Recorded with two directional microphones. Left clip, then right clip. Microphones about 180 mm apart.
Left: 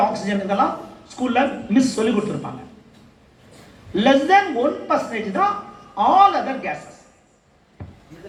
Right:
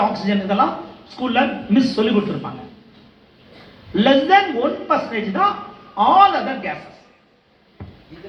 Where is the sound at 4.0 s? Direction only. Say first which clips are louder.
Right 1 dB; 15° left (ahead or behind).